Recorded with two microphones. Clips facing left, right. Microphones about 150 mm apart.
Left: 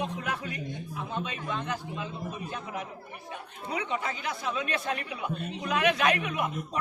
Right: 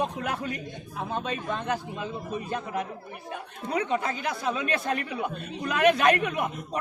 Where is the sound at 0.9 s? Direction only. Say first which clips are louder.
Right 6 dB; 40° right (ahead or behind).